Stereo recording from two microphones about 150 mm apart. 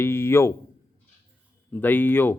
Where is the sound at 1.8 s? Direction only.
15° left (ahead or behind).